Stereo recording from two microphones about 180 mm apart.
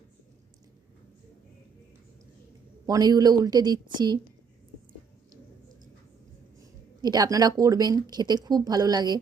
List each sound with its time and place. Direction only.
2.8 s speech: 20° right (ahead or behind)
7.0 s speech: 20° right (ahead or behind)